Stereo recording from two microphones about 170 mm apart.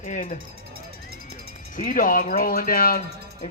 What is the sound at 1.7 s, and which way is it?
Speech, 50° left (ahead or behind).